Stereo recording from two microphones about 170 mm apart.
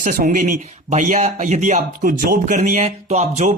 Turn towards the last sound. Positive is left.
turn(degrees=-45)  # may be behind; listen again after turning